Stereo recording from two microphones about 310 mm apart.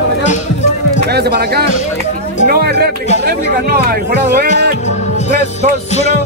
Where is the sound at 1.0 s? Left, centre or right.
Right.